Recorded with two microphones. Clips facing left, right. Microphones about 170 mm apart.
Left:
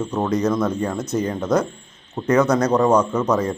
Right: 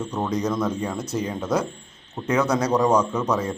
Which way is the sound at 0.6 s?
10° right (ahead or behind).